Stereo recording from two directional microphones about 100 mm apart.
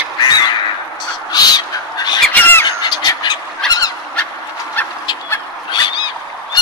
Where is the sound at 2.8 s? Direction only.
45° left (ahead or behind).